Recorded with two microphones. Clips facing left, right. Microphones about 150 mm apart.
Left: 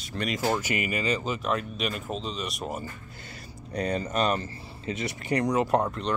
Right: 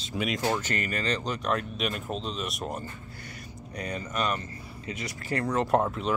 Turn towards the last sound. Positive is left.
turn(degrees=0)  # may be behind; listen again after turning